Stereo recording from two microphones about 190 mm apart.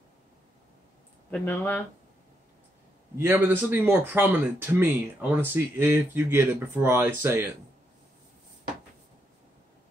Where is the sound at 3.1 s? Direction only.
10° right (ahead or behind).